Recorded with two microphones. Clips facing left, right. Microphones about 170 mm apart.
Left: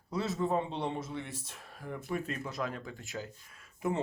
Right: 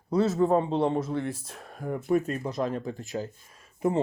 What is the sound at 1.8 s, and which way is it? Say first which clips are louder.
Speech: right 11 dB; 45° right (ahead or behind).